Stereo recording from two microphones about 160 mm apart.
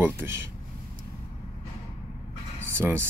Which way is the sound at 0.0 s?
15° right (ahead or behind).